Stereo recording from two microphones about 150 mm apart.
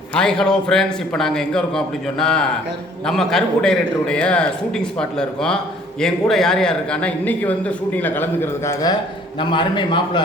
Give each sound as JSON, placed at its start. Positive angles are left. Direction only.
{"t": 0.1, "sound": "a man's voice", "side_deg": 5}
{"t": 9.4, "sound": "a man's voice", "side_deg": 35}